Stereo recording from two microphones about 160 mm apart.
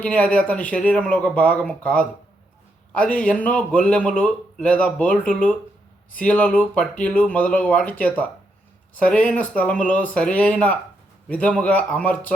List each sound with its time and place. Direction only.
0.0 s speech: 10° left (ahead or behind)